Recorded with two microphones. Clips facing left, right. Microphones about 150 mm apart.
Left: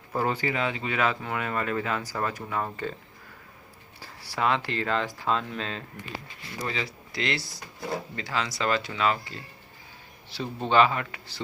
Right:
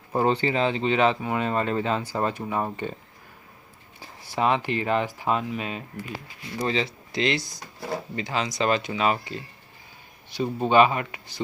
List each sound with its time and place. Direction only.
0.1 s speech: 25° right (ahead or behind)
4.0 s speech: 20° right (ahead or behind)
6.6 s speech: 25° right (ahead or behind)